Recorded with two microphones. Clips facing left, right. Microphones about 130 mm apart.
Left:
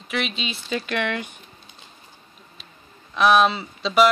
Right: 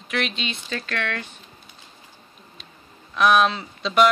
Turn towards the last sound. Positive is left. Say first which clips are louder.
# left 1 dB
turn(degrees=5)  # may be behind; listen again after turning